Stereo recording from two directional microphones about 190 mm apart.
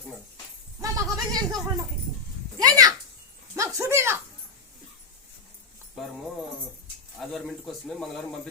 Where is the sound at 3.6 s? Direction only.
15° right (ahead or behind).